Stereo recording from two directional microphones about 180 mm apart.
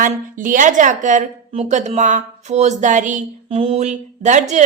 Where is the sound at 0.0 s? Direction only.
50° right (ahead or behind).